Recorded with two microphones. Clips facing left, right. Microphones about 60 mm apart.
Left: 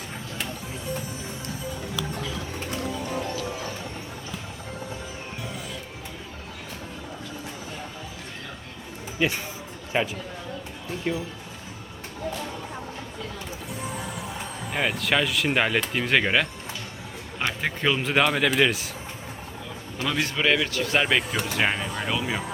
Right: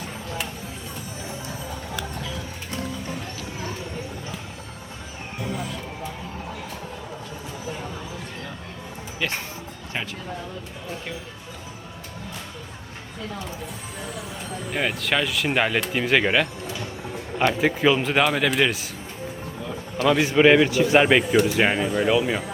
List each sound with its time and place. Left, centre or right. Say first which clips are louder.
9.2 s speech: left 3 dB; centre
14.7 s speech: even; centre
20.1 s speech: right 7 dB; centre
20.3 s speech: right 9 dB; right